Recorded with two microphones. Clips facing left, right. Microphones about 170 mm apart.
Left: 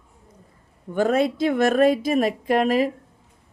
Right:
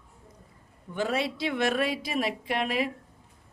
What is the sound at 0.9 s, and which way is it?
Speech, 50° left (ahead or behind).